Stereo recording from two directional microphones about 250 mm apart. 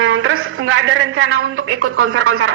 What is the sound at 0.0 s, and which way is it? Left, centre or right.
A man's voice, right.